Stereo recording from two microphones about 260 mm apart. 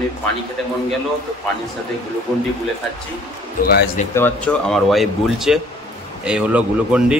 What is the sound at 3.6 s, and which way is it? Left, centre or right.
Speech, left.